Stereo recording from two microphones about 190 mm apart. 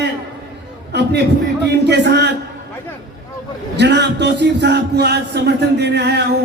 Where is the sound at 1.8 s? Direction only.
60° right (ahead or behind).